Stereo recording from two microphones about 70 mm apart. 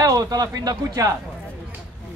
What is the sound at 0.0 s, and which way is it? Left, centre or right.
Speech, right.